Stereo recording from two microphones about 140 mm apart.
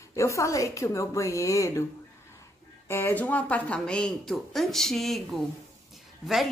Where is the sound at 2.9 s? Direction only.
15° left (ahead or behind).